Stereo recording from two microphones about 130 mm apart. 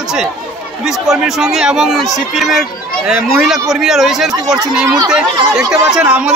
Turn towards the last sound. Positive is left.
turn(degrees=-10)  # may be behind; listen again after turning